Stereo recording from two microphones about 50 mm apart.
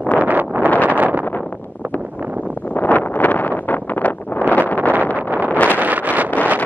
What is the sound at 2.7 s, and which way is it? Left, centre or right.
Vehicle, left.